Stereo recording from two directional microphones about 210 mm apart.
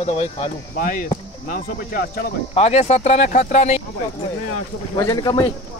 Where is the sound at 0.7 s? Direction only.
45° left (ahead or behind).